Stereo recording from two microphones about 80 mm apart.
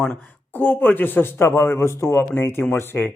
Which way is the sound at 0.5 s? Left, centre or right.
Left.